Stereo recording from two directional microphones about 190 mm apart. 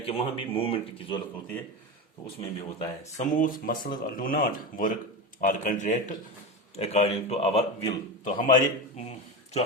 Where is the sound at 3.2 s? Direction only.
45° left (ahead or behind).